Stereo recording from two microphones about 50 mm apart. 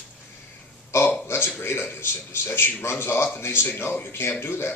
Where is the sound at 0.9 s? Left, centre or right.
Left.